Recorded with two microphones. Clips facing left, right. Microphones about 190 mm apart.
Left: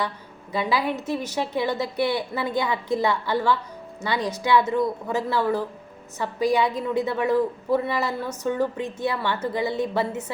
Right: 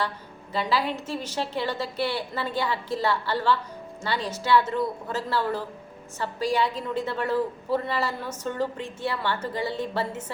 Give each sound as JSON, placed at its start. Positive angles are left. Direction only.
{"t": 0.5, "sound": "a woman's voice", "side_deg": 10}